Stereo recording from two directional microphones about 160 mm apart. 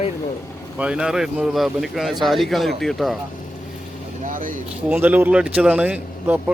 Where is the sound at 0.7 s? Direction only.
5° right (ahead or behind).